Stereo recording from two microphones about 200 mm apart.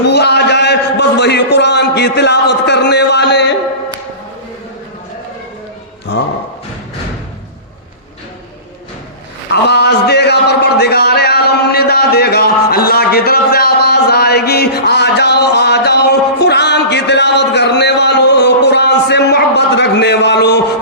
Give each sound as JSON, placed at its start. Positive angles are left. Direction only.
{"t": 0.1, "sound": "a man's voice", "side_deg": 55}
{"t": 9.5, "sound": "a man's voice", "side_deg": 55}